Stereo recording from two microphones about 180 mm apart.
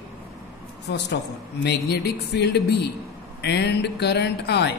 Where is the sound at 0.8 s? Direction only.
75° left (ahead or behind).